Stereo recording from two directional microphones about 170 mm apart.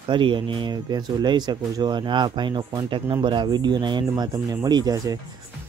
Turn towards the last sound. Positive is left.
turn(degrees=-25)  # may be behind; listen again after turning